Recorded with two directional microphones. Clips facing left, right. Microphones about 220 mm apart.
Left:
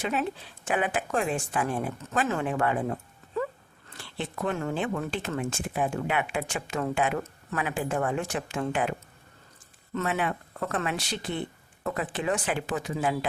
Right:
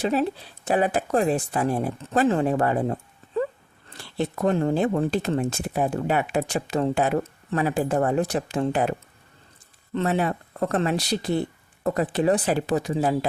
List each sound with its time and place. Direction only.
0.0 s speech: 35° right (ahead or behind)